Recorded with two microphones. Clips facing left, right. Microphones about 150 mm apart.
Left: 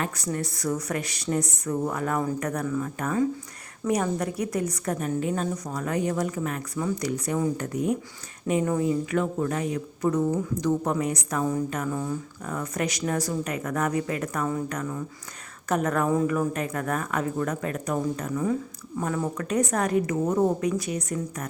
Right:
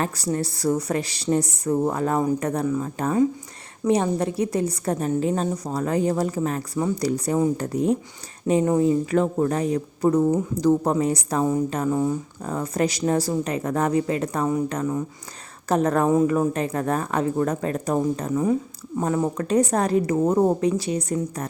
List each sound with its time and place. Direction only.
0.0 s speech: 30° right (ahead or behind)